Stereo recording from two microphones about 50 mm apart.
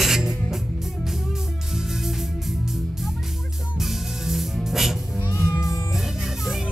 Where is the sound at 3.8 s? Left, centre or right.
Centre.